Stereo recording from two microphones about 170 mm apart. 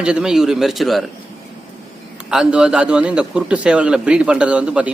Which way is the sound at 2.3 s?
5° right (ahead or behind).